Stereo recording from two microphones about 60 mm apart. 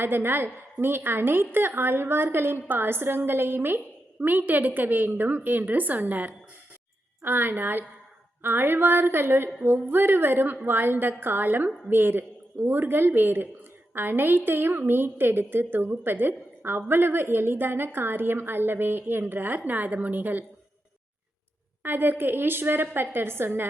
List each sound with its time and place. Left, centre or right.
0.0 s a woman's voice: right
21.8 s a woman's voice: right